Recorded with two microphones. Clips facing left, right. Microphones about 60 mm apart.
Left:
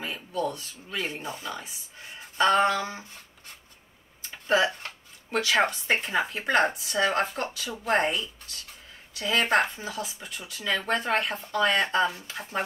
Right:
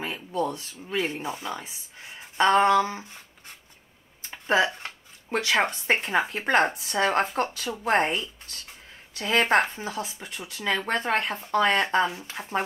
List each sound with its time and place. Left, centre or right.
0.0 s a sound: right
1.2 s speech: right
4.5 s speech: right